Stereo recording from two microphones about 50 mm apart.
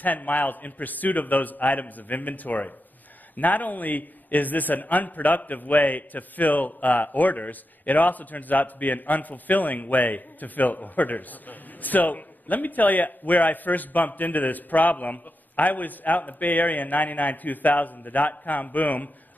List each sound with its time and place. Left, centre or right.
0.0 s a man's voice: left